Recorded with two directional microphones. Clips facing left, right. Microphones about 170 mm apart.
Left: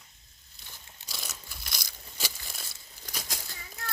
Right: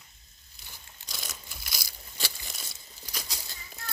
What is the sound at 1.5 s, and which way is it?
Crunch, 5° right (ahead or behind).